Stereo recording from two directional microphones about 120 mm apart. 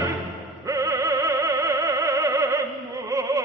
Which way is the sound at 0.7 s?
25° right (ahead or behind).